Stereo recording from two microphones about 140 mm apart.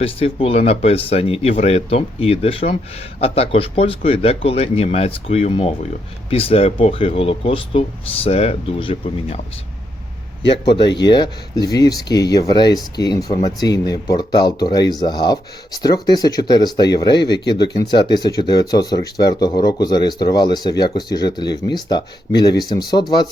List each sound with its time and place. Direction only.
0.0 s speech: 45° left (ahead or behind)
10.7 s speech: 35° left (ahead or behind)